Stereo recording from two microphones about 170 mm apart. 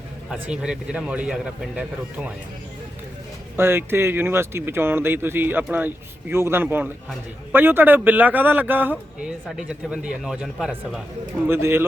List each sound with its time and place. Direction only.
0.3 s a man's voice: 5° right (ahead or behind)
3.6 s a man's voice: 15° right (ahead or behind)